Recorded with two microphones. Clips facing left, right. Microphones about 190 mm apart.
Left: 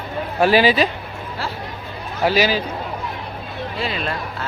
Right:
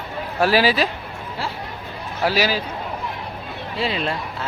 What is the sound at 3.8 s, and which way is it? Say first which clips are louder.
Speech: right 2 dB; 25° right (ahead or behind).